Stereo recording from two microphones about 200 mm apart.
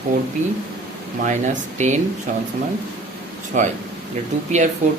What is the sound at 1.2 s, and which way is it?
Speech, 35° right (ahead or behind).